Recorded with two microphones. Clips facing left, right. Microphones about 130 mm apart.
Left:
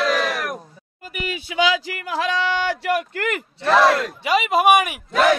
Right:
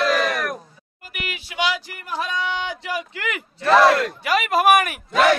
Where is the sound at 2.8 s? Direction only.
60° left (ahead or behind).